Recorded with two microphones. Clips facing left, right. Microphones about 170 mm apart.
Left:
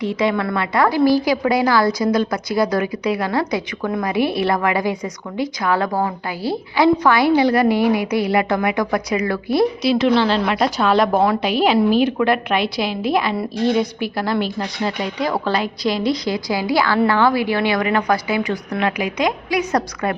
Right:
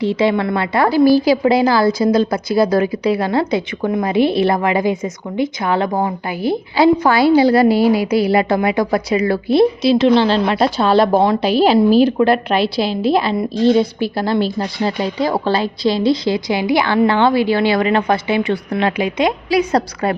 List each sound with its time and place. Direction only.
0.0 s a woman's voice: 30° right (ahead or behind)